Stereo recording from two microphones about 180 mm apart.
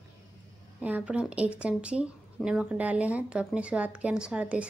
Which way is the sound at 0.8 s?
5° right (ahead or behind).